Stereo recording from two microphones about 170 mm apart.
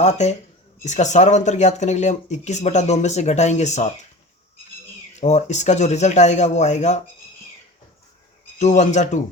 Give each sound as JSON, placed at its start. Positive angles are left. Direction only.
{"t": 0.0, "sound": "speech", "side_deg": 40}
{"t": 5.2, "sound": "speech", "side_deg": 45}
{"t": 8.5, "sound": "speech", "side_deg": 45}